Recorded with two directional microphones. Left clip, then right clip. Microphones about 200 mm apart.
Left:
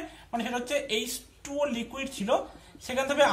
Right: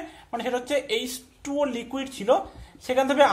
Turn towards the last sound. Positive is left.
turn(degrees=-40)  # may be behind; listen again after turning